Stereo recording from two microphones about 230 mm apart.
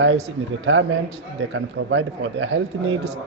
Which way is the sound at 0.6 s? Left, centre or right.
Right.